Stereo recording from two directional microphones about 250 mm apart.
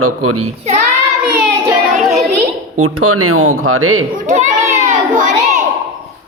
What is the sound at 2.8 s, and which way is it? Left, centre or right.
A man's voice, right.